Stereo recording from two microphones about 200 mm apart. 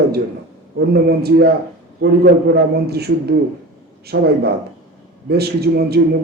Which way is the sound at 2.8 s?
50° right (ahead or behind).